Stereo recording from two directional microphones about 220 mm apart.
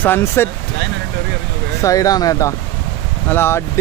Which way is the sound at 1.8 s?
15° left (ahead or behind).